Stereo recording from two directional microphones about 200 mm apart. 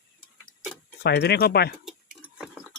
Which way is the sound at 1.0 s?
55° left (ahead or behind).